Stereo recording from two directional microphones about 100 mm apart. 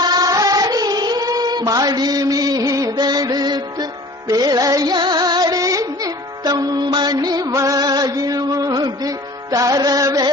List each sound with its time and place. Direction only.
0.0 s music: 40° right (ahead or behind)